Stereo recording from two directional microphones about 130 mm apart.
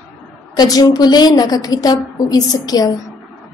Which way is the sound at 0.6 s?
30° left (ahead or behind).